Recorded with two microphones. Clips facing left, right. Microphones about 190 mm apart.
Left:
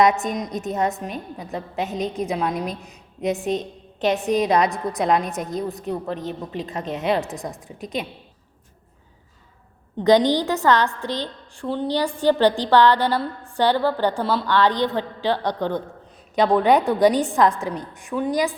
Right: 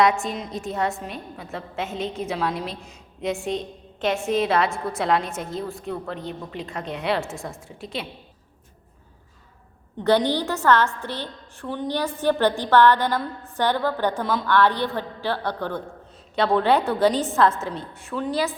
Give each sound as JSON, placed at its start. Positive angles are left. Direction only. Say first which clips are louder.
{"t": 0.0, "sound": "a woman's voice", "louder": "left 2 dB", "side_deg": 20}
{"t": 10.0, "sound": "a woman's voice", "louder": "left 4 dB", "side_deg": 15}